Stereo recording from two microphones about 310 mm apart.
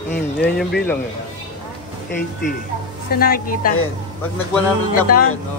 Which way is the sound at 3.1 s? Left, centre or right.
Left.